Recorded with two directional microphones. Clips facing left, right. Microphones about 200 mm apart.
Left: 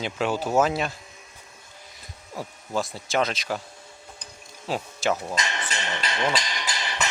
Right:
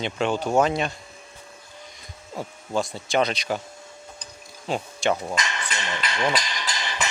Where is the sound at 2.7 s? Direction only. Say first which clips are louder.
Right 2 dB; centre (ahead or behind).